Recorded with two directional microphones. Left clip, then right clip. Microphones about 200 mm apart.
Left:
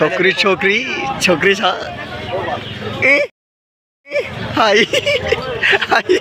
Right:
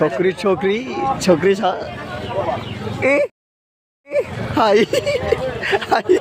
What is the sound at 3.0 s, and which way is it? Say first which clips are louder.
Speech: left 3 dB; 20° right (ahead or behind).